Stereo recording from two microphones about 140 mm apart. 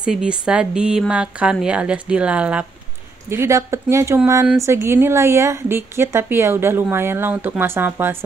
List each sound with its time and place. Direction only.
0.0 s a woman's voice: 5° right (ahead or behind)
3.3 s a woman's voice: 20° right (ahead or behind)